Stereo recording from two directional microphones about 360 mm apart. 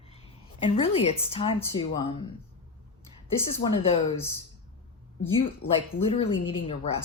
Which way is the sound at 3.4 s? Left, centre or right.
Centre.